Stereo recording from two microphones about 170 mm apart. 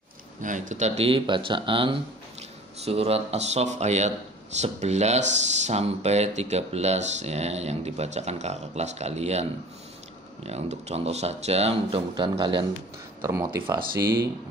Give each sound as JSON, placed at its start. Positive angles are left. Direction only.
{"t": 0.4, "sound": "speech", "side_deg": -50}
{"t": 13.2, "sound": "speech", "side_deg": -15}